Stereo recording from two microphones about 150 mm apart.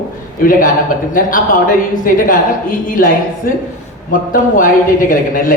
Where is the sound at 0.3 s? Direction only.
65° left (ahead or behind).